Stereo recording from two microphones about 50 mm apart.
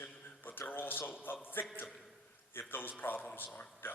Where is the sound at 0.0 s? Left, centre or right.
Left.